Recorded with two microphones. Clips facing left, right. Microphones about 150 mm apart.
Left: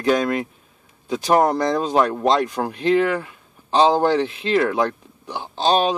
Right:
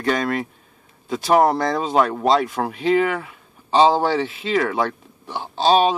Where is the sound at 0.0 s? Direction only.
Centre (ahead or behind).